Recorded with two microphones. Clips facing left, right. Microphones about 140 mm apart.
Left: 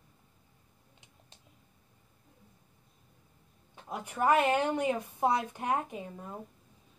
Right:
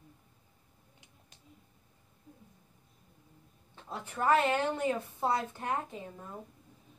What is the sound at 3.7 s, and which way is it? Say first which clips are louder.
A woman's voice: left 2 dB; 15° left (ahead or behind).